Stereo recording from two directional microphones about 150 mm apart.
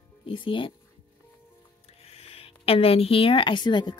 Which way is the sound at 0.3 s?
35° left (ahead or behind).